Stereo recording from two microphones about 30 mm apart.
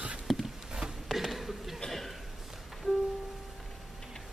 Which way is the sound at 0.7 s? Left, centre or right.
Right.